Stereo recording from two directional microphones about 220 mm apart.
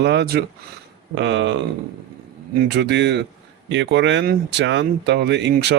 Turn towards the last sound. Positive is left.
turn(degrees=-50)  # may be behind; listen again after turning